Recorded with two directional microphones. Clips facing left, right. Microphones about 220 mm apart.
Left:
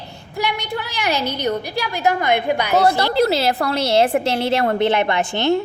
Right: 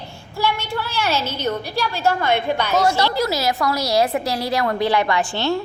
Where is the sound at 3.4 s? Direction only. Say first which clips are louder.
Left 2 dB; 30° left (ahead or behind).